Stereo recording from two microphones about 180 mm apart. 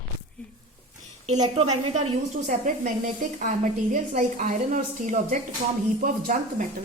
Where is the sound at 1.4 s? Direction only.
30° right (ahead or behind).